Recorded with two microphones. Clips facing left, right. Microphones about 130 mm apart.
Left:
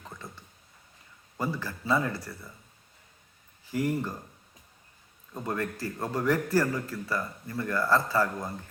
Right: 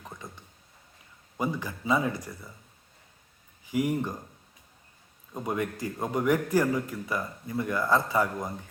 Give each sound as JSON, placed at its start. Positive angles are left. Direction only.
{"t": 0.0, "sound": "a sound", "side_deg": -15}
{"t": 1.4, "sound": "a man's voice", "side_deg": -15}
{"t": 3.7, "sound": "a man's voice", "side_deg": -15}
{"t": 5.3, "sound": "a man's voice", "side_deg": -15}